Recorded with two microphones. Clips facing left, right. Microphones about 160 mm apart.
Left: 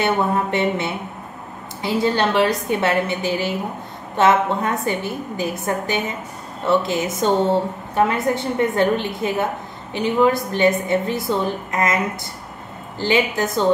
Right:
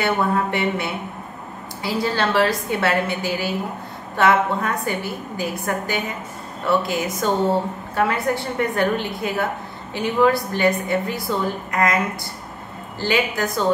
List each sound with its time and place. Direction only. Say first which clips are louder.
0.0 s a woman's voice: left 1 dB; 20° left (ahead or behind)
13.0 s a woman's voice: left 2 dB; 20° left (ahead or behind)